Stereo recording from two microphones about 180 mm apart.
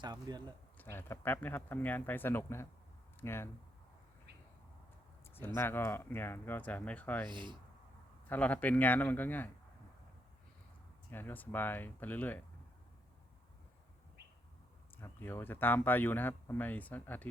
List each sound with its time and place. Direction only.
0.0 s speech: 25° right (ahead or behind)
0.8 s speech: 10° left (ahead or behind)
5.5 s speech: 10° left (ahead or behind)
7.3 s speech: 25° right (ahead or behind)
8.3 s speech: 10° left (ahead or behind)
11.1 s speech: 10° left (ahead or behind)
15.0 s speech: 10° left (ahead or behind)